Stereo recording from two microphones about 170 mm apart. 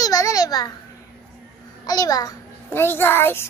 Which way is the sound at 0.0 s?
20° left (ahead or behind).